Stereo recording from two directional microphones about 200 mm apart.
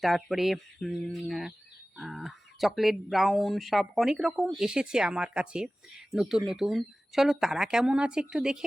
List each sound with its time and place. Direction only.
0.0 s speech: centre (ahead or behind)